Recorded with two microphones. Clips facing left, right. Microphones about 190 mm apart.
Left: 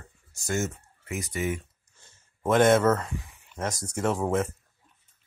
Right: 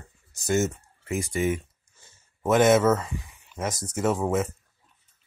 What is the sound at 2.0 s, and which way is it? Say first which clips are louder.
Speech: right 2 dB; 5° right (ahead or behind).